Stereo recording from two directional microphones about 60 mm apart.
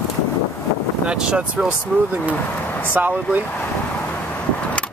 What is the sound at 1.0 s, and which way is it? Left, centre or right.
Speech, centre.